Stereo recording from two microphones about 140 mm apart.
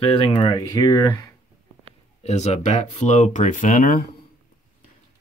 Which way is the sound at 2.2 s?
50° left (ahead or behind).